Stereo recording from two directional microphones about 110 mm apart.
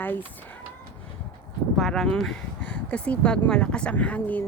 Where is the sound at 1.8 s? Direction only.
5° left (ahead or behind).